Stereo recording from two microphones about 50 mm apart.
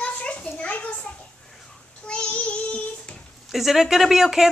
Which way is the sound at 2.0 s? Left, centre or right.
Centre.